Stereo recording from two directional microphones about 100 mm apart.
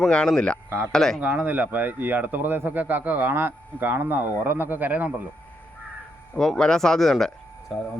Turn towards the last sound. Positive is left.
turn(degrees=0)  # may be behind; listen again after turning